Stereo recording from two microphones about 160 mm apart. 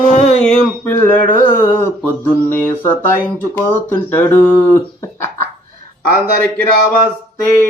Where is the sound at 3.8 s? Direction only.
10° left (ahead or behind).